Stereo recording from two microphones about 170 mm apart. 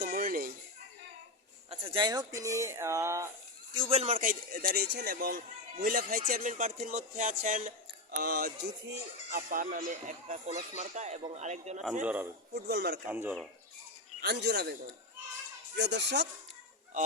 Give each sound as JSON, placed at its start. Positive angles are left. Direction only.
{"t": 0.0, "sound": "a sound", "side_deg": -60}
{"t": 1.7, "sound": "speech", "side_deg": -30}
{"t": 3.8, "sound": "speech", "side_deg": -35}
{"t": 8.1, "sound": "a man's voice", "side_deg": -60}
{"t": 12.0, "sound": "a man's voice", "side_deg": -10}
{"t": 12.6, "sound": "speech", "side_deg": -65}
{"t": 13.1, "sound": "a man's voice", "side_deg": -10}
{"t": 14.2, "sound": "speech", "side_deg": -75}
{"t": 15.7, "sound": "speech", "side_deg": -90}